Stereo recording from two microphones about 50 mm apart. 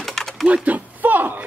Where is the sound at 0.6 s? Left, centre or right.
Right.